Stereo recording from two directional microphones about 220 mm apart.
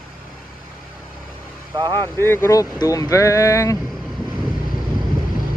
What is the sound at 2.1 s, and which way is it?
Speech, 10° left (ahead or behind).